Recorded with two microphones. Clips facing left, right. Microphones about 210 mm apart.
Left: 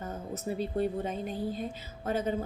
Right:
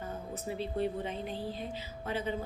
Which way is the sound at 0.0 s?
45° left (ahead or behind).